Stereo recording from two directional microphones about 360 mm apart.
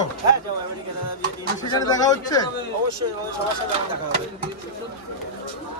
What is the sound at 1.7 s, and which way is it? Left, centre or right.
Speech, centre.